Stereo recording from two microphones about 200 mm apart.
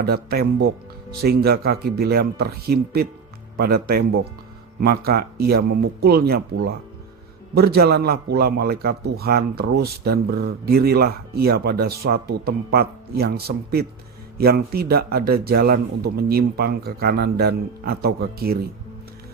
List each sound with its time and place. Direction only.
0.0 s a man's voice: 50° right (ahead or behind)